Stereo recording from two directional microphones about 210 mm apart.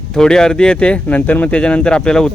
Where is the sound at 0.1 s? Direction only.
5° left (ahead or behind).